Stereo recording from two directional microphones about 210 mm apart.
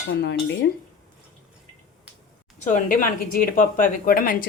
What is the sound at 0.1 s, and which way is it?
Cutlery, 55° left (ahead or behind).